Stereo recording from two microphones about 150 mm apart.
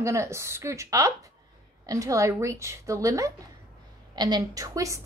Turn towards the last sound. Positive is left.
turn(degrees=-20)  # may be behind; listen again after turning